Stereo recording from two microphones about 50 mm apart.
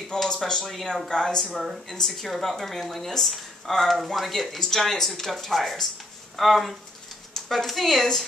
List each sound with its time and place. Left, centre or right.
0.1 s speech: centre
1.5 s speech: centre
1.9 s speech: centre